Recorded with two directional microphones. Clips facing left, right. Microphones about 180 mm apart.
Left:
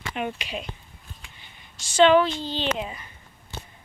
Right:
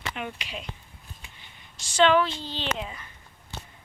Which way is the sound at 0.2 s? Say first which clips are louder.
Left 5 dB; 20° left (ahead or behind).